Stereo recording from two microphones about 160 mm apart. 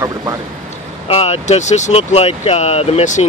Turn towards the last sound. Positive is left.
turn(degrees=45)  # may be behind; listen again after turning